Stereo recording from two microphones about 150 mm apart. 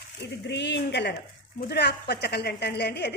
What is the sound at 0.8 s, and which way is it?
A woman's voice, 90° left.